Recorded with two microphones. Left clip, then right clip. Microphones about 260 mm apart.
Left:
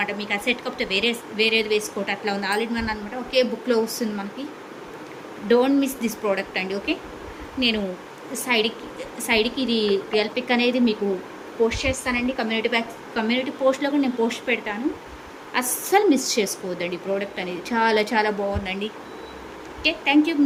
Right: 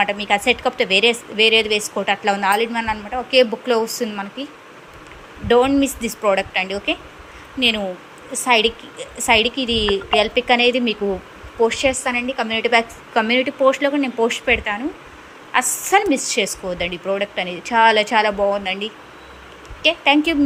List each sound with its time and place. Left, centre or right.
0.0 s a woman's voice: centre
5.5 s a woman's voice: centre
8.3 s a woman's voice: centre